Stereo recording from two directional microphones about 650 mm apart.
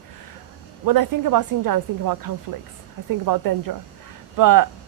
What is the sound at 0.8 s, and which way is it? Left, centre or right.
Speech, right.